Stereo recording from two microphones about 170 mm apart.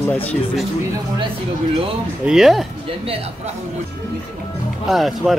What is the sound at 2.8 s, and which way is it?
Speech, 35° right (ahead or behind).